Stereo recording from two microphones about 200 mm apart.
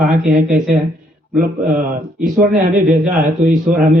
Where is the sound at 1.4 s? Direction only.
45° right (ahead or behind).